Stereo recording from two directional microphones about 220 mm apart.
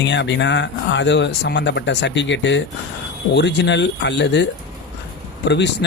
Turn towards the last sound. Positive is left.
turn(degrees=50)  # may be behind; listen again after turning